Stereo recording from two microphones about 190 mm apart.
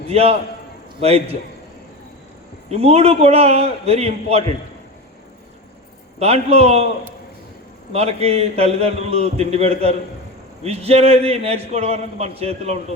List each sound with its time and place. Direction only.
0.1 s a man's voice: 35° right (ahead or behind)
2.6 s a man's voice: 35° right (ahead or behind)
6.1 s a man's voice: 35° right (ahead or behind)